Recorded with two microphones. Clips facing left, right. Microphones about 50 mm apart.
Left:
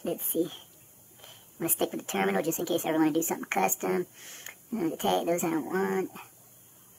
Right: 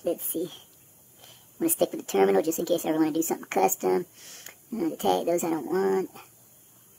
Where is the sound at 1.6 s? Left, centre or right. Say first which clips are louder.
Right 5 dB; centre.